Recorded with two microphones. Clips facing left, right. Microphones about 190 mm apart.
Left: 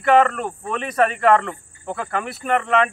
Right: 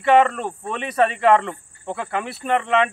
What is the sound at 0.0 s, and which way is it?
Speech, centre (ahead or behind).